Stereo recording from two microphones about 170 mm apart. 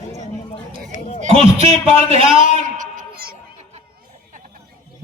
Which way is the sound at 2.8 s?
55° right (ahead or behind).